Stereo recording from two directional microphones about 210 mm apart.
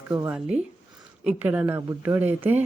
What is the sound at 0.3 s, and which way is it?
Speech, 5° right (ahead or behind).